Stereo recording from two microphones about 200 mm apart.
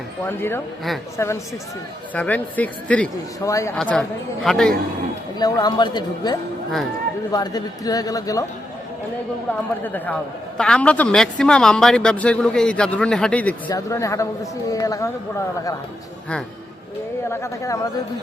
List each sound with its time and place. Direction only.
0.3 s speech: 10° left (ahead or behind)
3.8 s speech: 5° left (ahead or behind)
5.4 s speech: 20° left (ahead or behind)
9.8 s speech: 10° left (ahead or behind)
17.3 s speech: 15° left (ahead or behind)